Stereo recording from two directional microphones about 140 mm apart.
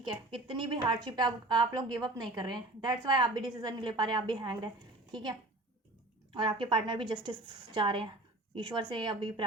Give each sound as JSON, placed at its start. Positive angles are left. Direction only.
{"t": 0.1, "sound": "a woman's voice", "side_deg": -40}
{"t": 6.3, "sound": "a woman's voice", "side_deg": -35}